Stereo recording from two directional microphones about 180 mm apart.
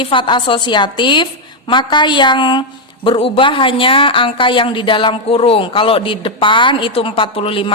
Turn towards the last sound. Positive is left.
turn(degrees=30)  # may be behind; listen again after turning